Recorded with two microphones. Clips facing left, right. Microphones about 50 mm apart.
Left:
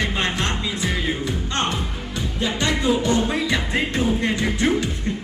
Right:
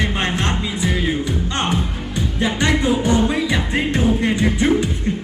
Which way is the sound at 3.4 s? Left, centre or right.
Centre.